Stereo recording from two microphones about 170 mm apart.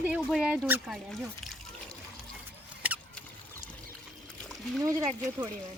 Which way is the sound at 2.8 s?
10° right (ahead or behind).